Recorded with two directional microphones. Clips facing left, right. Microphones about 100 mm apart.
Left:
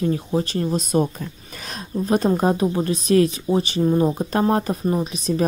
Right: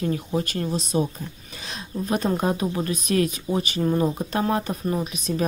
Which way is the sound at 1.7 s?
35° left (ahead or behind).